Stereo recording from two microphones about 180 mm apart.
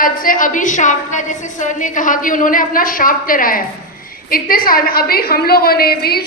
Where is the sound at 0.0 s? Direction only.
50° left (ahead or behind).